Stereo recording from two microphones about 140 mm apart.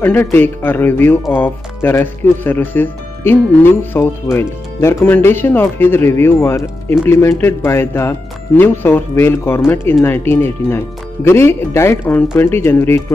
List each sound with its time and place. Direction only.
0.0 s speech: 15° left (ahead or behind)